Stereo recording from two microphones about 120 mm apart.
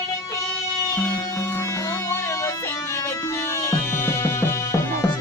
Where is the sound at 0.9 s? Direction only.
20° left (ahead or behind).